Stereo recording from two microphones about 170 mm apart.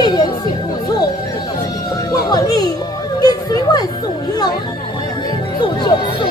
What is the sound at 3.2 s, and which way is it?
Children playing, 20° left (ahead or behind).